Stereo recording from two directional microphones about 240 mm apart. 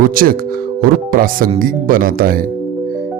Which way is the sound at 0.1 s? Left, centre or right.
Right.